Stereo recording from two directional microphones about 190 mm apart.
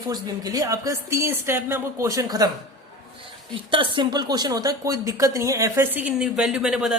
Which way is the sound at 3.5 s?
25° right (ahead or behind).